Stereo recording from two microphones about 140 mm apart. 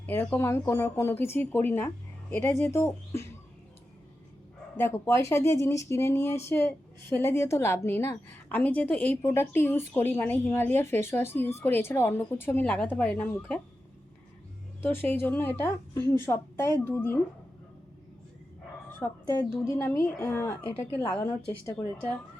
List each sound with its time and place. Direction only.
0.0 s a woman's voice: 15° left (ahead or behind)
4.8 s a woman's voice: 15° left (ahead or behind)
14.8 s a woman's voice: 15° left (ahead or behind)
19.2 s a woman's voice: 30° left (ahead or behind); by 21.2 s 10° left (ahead or behind)
21.2 s speech: 20° left (ahead or behind)